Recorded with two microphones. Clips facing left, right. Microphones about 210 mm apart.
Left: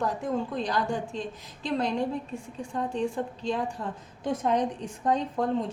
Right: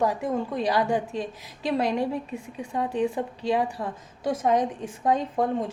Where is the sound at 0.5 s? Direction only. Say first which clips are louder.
Right 4 dB; 10° right (ahead or behind).